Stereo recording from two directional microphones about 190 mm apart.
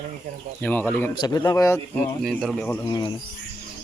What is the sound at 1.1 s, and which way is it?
Speech, 20° left (ahead or behind).